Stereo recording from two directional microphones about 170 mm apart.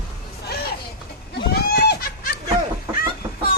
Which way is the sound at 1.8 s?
65° left (ahead or behind).